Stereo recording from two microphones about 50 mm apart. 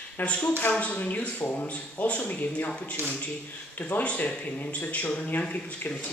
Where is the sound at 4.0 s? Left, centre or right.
Left.